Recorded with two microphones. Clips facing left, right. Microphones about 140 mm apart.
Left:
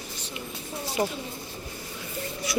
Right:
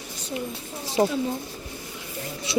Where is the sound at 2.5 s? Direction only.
25° right (ahead or behind).